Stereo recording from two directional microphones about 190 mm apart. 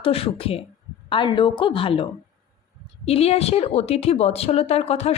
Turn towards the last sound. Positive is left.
turn(degrees=35)  # may be behind; listen again after turning